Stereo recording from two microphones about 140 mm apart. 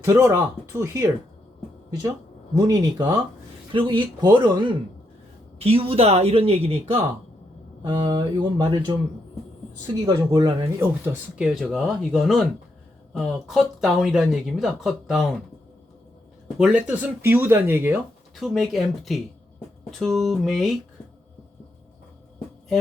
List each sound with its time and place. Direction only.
0.0 s speech: 20° right (ahead or behind)
3.7 s speech: 35° right (ahead or behind)
5.5 s speech: 45° right (ahead or behind)
7.8 s speech: 30° right (ahead or behind)
10.3 s speech: 30° right (ahead or behind)
10.8 s speech: 15° right (ahead or behind)
16.6 s speech: 10° right (ahead or behind)
18.3 s speech: centre (ahead or behind)